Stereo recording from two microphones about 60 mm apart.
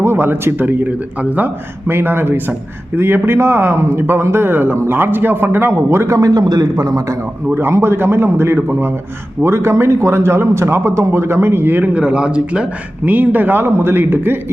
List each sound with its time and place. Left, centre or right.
0.0 s a man's voice: right
1.9 s a man's voice: right
6.1 s a man's voice: right
7.5 s a man's voice: right
9.4 s a man's voice: right
11.9 s a man's voice: centre
13.1 s a man's voice: right